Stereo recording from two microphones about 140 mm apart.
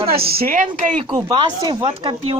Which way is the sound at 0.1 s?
90° right.